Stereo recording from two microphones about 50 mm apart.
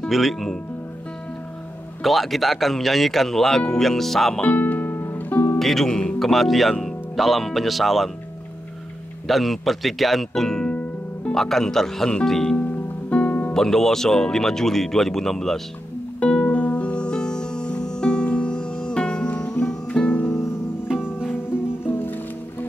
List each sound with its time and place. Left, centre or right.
0.1 s speech: centre
2.0 s speech: centre
4.4 s music: left
5.6 s speech: centre
9.3 s speech: centre
12.5 s music: left
13.5 s speech: centre
16.2 s music: left
20.9 s music: centre
22.0 s music: left